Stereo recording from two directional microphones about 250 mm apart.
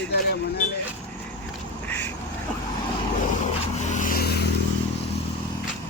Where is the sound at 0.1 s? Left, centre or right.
Left.